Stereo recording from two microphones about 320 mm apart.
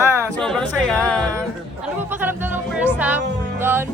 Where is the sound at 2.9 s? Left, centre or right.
Centre.